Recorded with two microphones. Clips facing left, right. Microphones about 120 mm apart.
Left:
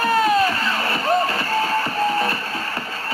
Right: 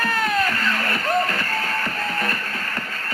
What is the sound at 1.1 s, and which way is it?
Music, 15° left (ahead or behind).